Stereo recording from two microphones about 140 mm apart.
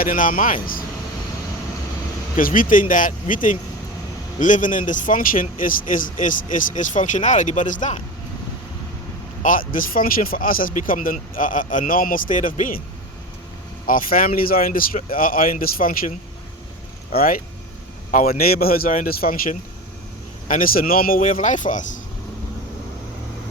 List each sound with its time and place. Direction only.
0.0 s a man's voice: 80° left
2.3 s a man's voice: 75° left (ahead or behind)
9.4 s a man's voice: 75° left (ahead or behind)
13.8 s a man's voice: 90° left; by 22.0 s 65° left (ahead or behind)